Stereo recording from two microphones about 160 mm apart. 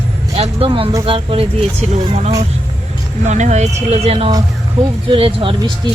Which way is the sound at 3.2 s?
45° right (ahead or behind).